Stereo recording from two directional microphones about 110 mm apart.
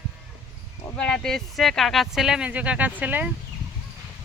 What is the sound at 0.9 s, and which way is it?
Speech, 5° left (ahead or behind).